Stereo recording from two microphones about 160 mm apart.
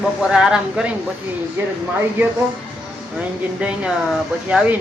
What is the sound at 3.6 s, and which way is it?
Speech, 10° right (ahead or behind).